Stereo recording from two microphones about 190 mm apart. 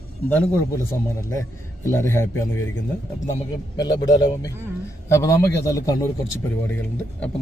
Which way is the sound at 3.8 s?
20° left (ahead or behind).